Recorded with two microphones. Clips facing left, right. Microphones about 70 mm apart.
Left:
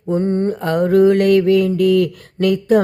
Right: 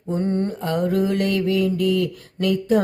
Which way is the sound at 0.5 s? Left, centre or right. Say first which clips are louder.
Left 7 dB; left.